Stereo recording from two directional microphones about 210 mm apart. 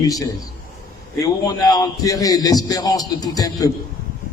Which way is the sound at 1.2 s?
15° left (ahead or behind).